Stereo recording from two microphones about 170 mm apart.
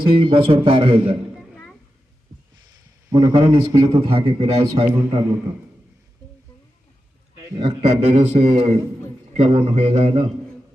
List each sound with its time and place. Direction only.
0.0 s a man's voice: 30° right (ahead or behind)
1.4 s a sound: 5° left (ahead or behind)
3.1 s a man's voice: 20° right (ahead or behind)
3.3 s a man's voice: 30° right (ahead or behind)
4.9 s a man's voice: 15° right (ahead or behind)
7.5 s a man's voice: 30° right (ahead or behind)